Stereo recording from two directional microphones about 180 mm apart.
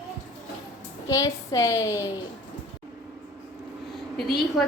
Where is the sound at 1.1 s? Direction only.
20° left (ahead or behind).